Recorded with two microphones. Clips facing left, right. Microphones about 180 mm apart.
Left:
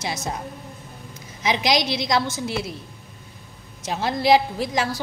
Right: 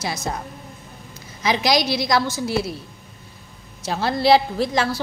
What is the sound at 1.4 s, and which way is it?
Speech, 20° left (ahead or behind).